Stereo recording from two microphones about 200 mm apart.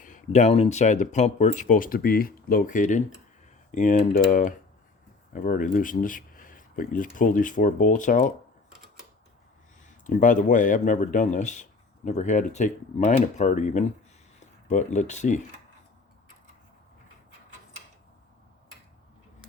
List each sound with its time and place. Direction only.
0.0 s speech: 40° left (ahead or behind)
10.1 s speech: 40° left (ahead or behind)